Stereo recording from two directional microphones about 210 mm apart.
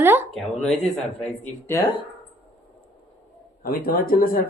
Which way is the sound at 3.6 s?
45° left (ahead or behind).